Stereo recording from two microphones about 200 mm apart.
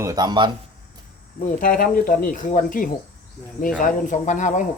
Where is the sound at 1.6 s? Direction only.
45° left (ahead or behind).